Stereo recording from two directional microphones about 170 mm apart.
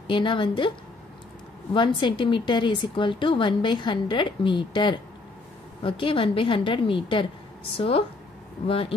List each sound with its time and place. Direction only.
0.0 s a woman's voice: 30° left (ahead or behind)